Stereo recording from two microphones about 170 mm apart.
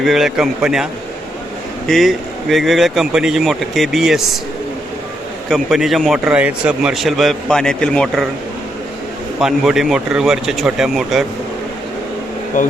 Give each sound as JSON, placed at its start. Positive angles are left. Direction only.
{"t": 0.0, "sound": "a man's voice", "side_deg": 0}
{"t": 1.9, "sound": "a man's voice", "side_deg": 0}
{"t": 5.5, "sound": "a man's voice", "side_deg": 0}
{"t": 9.4, "sound": "a man's voice", "side_deg": 0}
{"t": 12.6, "sound": "speech", "side_deg": 50}